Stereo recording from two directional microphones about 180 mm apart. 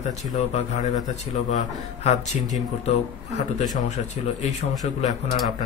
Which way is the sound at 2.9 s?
40° left (ahead or behind).